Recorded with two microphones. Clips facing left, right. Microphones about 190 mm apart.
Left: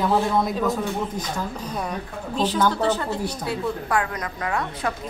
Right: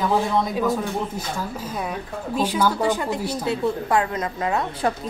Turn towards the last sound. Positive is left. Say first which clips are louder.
# right 3 dB
turn(degrees=-25)  # may be behind; listen again after turning